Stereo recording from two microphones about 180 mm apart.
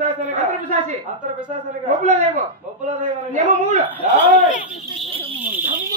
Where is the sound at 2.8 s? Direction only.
40° right (ahead or behind).